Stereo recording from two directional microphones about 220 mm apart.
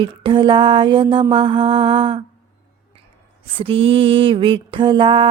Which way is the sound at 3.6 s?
25° right (ahead or behind).